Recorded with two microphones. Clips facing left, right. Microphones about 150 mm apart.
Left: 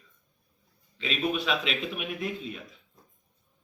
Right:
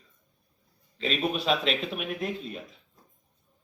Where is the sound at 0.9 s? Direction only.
40° right (ahead or behind).